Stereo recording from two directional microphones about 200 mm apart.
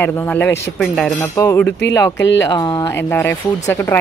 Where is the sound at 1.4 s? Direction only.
10° left (ahead or behind).